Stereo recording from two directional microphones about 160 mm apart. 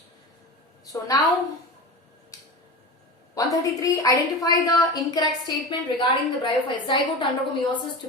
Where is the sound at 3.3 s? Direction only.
20° left (ahead or behind).